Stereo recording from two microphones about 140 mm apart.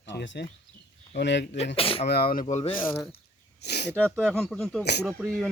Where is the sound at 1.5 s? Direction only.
40° left (ahead or behind).